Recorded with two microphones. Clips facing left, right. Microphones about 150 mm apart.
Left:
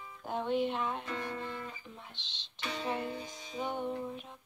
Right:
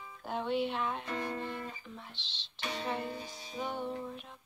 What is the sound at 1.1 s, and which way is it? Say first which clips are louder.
Speech: right 2 dB; 35° right (ahead or behind).